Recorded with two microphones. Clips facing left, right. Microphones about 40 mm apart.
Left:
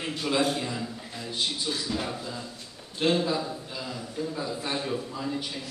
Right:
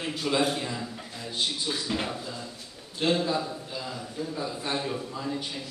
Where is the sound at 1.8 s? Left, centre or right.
Right.